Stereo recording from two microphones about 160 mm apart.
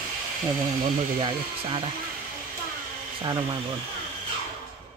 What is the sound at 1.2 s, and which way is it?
Speech, 30° right (ahead or behind).